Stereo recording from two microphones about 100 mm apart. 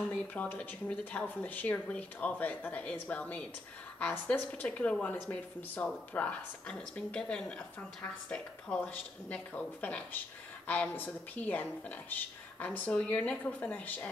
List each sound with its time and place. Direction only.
0.0 s speech: 15° left (ahead or behind)